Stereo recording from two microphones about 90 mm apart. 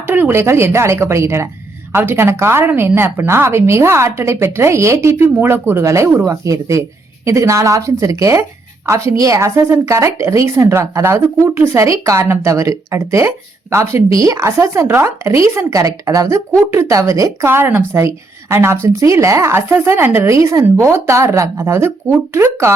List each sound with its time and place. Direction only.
0.1 s a woman's voice: 25° right (ahead or behind)
17.5 s a woman's voice: 25° right (ahead or behind)